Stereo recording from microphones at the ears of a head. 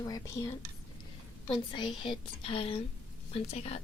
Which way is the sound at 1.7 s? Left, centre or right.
Left.